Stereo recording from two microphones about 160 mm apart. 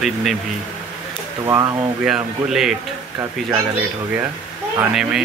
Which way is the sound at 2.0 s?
5° right (ahead or behind).